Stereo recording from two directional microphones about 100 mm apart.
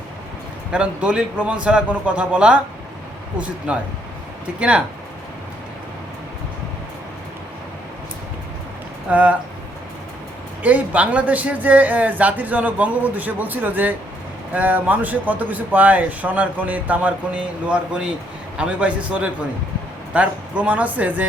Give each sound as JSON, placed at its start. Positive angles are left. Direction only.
{"t": 0.7, "sound": "speech", "side_deg": -10}
{"t": 9.0, "sound": "speech", "side_deg": -15}
{"t": 10.6, "sound": "speech", "side_deg": -15}